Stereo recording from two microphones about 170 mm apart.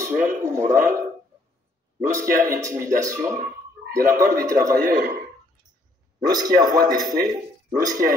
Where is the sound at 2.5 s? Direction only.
20° right (ahead or behind).